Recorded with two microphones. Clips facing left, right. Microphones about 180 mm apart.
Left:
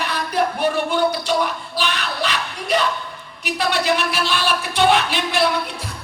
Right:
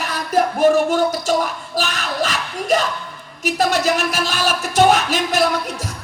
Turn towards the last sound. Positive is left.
turn(degrees=-45)  # may be behind; listen again after turning